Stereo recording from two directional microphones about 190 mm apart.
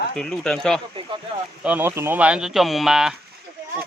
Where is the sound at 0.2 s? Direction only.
5° left (ahead or behind).